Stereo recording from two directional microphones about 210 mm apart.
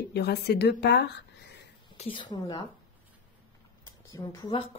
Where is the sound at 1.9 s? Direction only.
25° left (ahead or behind).